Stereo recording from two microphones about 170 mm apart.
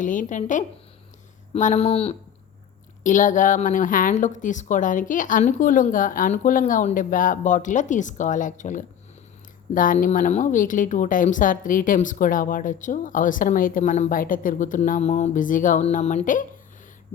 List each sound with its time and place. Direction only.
0.0 s speech: 50° left (ahead or behind)
3.0 s speech: 50° left (ahead or behind)